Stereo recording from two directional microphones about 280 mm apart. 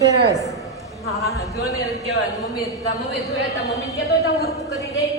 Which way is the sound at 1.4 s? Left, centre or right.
Centre.